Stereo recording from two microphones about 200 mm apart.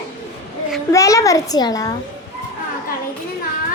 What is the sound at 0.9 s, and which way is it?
Speech, 15° left (ahead or behind).